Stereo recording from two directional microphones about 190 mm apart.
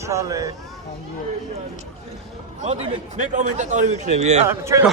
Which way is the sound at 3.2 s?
40° right (ahead or behind).